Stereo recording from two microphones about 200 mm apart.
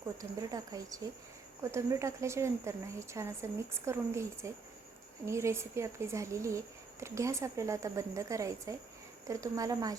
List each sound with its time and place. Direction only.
0.2 s a woman's voice: 15° right (ahead or behind)